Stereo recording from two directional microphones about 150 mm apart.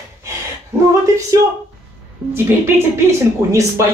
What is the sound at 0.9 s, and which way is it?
Speech, 20° right (ahead or behind).